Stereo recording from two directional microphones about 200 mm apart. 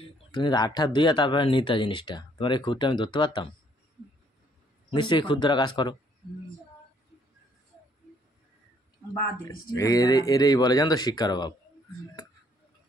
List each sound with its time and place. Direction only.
0.3 s speech: 20° left (ahead or behind)
4.9 s speech: 25° left (ahead or behind)
9.8 s speech: 15° left (ahead or behind)